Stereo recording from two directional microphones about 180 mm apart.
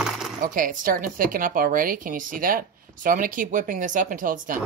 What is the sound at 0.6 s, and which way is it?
A woman's voice, 50° right (ahead or behind).